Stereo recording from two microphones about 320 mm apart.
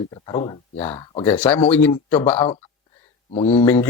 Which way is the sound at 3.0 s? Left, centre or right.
Centre.